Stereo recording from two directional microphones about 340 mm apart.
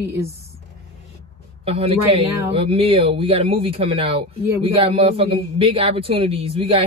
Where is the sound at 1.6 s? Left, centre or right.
Centre.